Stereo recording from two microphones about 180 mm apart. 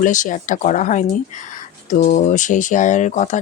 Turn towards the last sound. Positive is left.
turn(degrees=40)  # may be behind; listen again after turning